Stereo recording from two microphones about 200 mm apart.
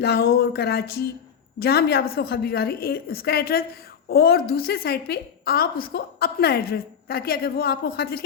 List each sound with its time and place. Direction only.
0.0 s a woman's voice: 55° left (ahead or behind)